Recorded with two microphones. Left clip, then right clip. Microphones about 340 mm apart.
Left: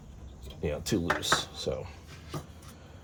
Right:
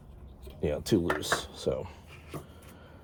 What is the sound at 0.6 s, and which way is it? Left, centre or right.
Speech, right.